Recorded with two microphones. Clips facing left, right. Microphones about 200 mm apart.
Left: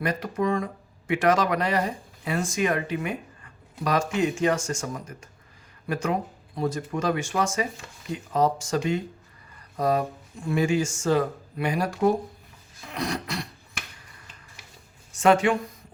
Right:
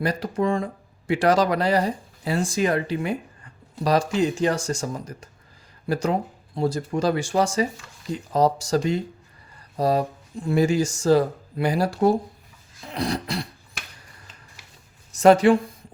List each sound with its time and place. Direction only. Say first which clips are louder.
0.0 s speech: right 2 dB; 30° right (ahead or behind)
12.9 s music: right 3 dB; 30° right (ahead or behind)
15.1 s speech: right 5 dB; 40° right (ahead or behind)